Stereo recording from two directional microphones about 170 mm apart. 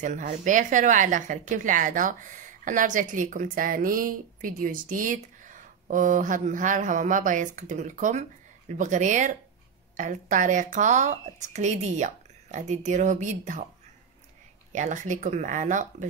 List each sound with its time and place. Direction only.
0.0 s a woman's voice: 45° right (ahead or behind)
14.7 s a woman's voice: 45° right (ahead or behind)